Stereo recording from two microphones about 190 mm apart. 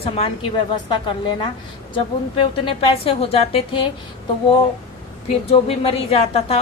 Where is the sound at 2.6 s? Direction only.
25° left (ahead or behind).